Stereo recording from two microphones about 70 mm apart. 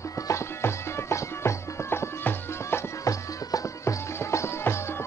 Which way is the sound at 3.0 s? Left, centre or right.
Left.